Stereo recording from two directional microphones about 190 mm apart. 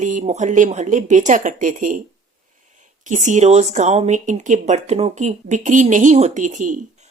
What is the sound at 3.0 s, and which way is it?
Speech, 40° right (ahead or behind).